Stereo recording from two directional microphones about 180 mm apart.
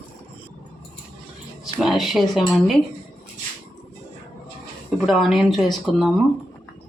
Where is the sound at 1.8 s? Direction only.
Centre (ahead or behind).